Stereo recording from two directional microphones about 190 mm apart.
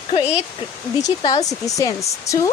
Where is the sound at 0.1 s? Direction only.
30° left (ahead or behind).